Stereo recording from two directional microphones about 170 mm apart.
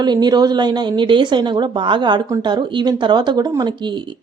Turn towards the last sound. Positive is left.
turn(degrees=-25)  # may be behind; listen again after turning